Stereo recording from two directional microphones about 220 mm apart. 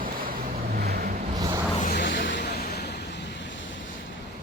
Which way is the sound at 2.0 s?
55° left (ahead or behind).